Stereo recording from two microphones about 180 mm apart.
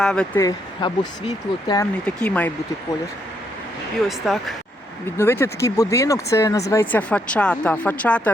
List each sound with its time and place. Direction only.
0.0 s speech: 5° left (ahead or behind)
0.3 s speech: 25° left (ahead or behind)
1.8 s speech: 5° left (ahead or behind)
4.2 s speech: centre (ahead or behind)
5.1 s speech: 15° left (ahead or behind)